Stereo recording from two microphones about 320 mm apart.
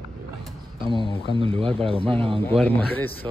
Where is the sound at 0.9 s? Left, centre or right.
Centre.